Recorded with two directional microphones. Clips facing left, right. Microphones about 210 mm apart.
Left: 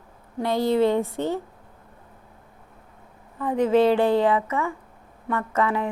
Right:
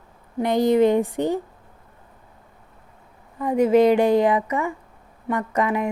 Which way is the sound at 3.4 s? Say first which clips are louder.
Right 3 dB; 10° right (ahead or behind).